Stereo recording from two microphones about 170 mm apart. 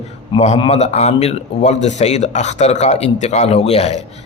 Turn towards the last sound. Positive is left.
turn(degrees=35)  # may be behind; listen again after turning